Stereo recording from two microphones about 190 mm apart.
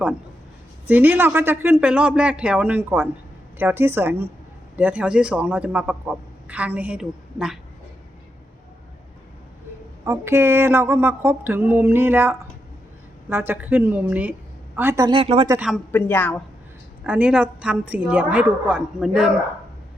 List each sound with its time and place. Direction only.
0.9 s a man's voice: 10° right (ahead or behind)
10.1 s a man's voice: 15° right (ahead or behind); by 15.4 s 30° right (ahead or behind)
15.4 s a man's voice: 5° right (ahead or behind)
15.9 s a woman's voice: 10° left (ahead or behind)
17.0 s a man's voice: 5° right (ahead or behind)